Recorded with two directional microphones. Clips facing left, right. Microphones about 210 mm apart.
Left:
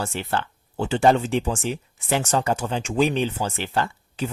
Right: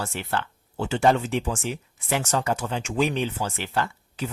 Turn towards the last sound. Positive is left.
turn(degrees=30)  # may be behind; listen again after turning